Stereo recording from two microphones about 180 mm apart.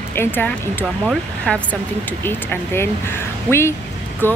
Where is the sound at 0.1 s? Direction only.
10° left (ahead or behind).